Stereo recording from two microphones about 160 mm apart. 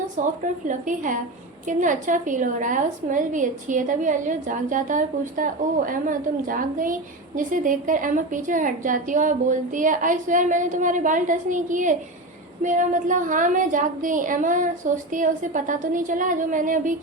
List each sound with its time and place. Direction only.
0.2 s a woman's voice: 55° right (ahead or behind)